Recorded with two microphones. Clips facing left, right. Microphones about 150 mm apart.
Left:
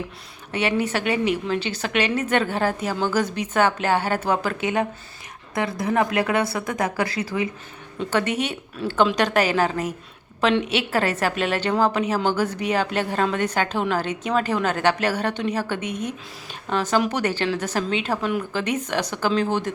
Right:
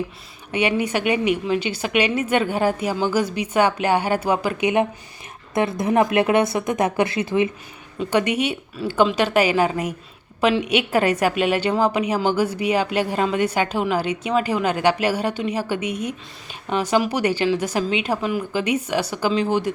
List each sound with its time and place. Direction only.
0.5 s a woman's voice: 10° right (ahead or behind)
7.9 s a woman's voice: 10° right (ahead or behind)